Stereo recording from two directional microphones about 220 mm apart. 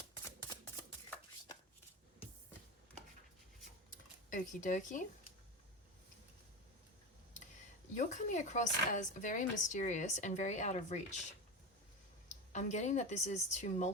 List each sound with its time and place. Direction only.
4.3 s speech: 35° left (ahead or behind)
7.9 s speech: 35° left (ahead or behind)
12.3 s speech: 30° left (ahead or behind)